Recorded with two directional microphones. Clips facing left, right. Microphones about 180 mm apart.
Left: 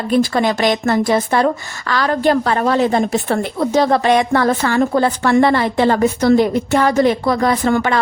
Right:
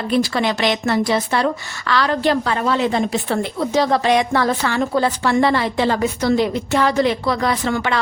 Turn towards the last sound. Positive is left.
turn(degrees=45)  # may be behind; listen again after turning